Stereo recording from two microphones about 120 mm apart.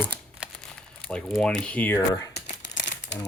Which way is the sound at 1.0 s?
5° left (ahead or behind).